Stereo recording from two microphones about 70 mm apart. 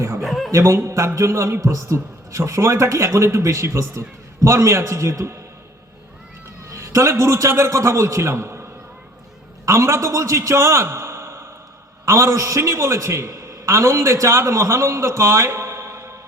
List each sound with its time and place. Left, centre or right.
0.2 s chuckle: centre
0.5 s a man's voice: right
6.7 s a man's voice: right
9.6 s a man's voice: right